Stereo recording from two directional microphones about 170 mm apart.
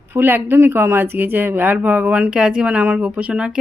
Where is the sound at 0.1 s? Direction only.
15° right (ahead or behind).